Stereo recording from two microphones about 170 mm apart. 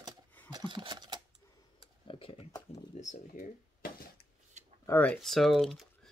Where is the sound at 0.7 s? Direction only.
25° right (ahead or behind).